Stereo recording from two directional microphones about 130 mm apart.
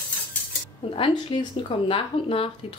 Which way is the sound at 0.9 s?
40° left (ahead or behind).